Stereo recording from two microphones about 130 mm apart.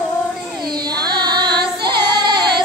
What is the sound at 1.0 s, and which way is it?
Music, 35° right (ahead or behind).